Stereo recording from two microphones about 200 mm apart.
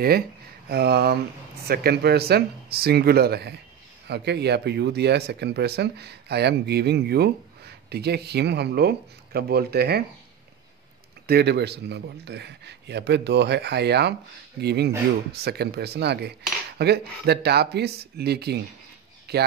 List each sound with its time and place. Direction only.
0.7 s cutlery: 55° right (ahead or behind)
4.1 s speech: 55° right (ahead or behind)
11.2 s speech: 55° right (ahead or behind)
15.3 s cutlery: 55° right (ahead or behind)
19.3 s speech: 55° right (ahead or behind)